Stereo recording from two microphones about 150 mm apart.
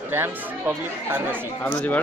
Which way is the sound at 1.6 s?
10° left (ahead or behind).